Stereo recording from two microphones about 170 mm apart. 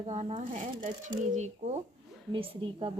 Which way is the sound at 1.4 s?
40° right (ahead or behind).